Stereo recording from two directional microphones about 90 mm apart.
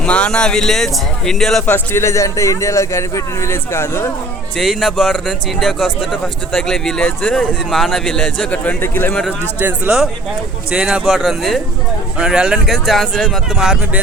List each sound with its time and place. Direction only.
0.0 s speech: 10° left (ahead or behind)
1.6 s speech: 25° left (ahead or behind)
4.5 s speech: centre (ahead or behind)
8.4 s speech: 15° left (ahead or behind)
9.6 s speech: 20° right (ahead or behind)